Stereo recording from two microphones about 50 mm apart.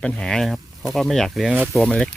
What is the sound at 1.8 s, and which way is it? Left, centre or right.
Speech, left.